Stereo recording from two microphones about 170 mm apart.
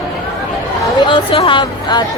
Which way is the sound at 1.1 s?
30° left (ahead or behind).